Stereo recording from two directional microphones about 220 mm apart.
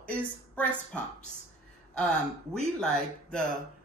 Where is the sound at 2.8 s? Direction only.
5° left (ahead or behind).